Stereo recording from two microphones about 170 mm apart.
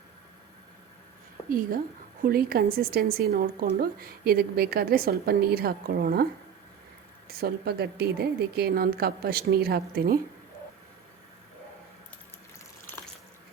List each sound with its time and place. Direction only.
1.5 s a woman's voice: 55° right (ahead or behind)
7.3 s speech: 65° right (ahead or behind)